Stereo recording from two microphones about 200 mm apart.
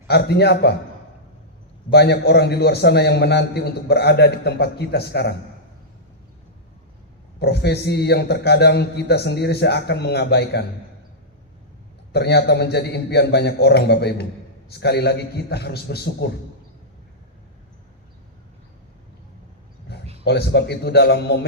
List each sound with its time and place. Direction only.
0.1 s a man's voice: 55° left (ahead or behind)
1.9 s a man's voice: 55° left (ahead or behind)
7.3 s a man's voice: 55° left (ahead or behind)
12.1 s a man's voice: 55° left (ahead or behind)
20.2 s a man's voice: 55° left (ahead or behind)